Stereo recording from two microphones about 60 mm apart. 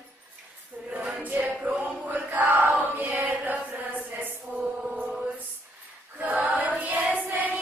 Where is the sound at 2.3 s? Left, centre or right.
Right.